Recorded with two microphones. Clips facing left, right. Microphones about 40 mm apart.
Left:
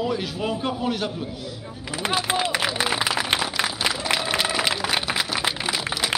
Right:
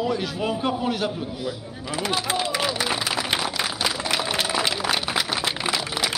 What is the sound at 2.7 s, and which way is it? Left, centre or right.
Applause, left.